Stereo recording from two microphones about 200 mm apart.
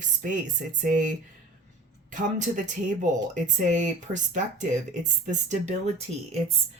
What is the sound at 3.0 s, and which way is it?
Speech, 40° right (ahead or behind).